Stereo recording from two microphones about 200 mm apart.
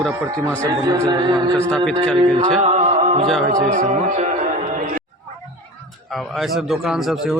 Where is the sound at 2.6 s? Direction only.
35° right (ahead or behind).